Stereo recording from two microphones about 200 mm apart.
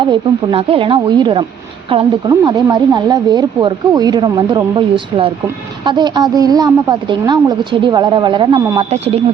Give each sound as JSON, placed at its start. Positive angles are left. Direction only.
{"t": 0.0, "sound": "a woman's voice", "side_deg": -25}
{"t": 8.8, "sound": "a woman's voice", "side_deg": -30}